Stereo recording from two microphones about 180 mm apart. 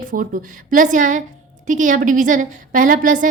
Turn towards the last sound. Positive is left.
turn(degrees=-45)  # may be behind; listen again after turning